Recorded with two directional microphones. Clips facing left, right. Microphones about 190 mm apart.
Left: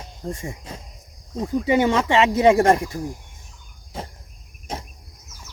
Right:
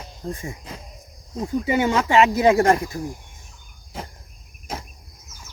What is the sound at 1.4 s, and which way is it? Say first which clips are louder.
Speech: left 2 dB; 30° left (ahead or behind).